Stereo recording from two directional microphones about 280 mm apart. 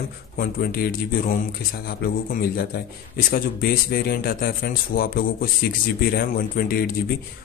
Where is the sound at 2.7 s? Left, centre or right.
Left.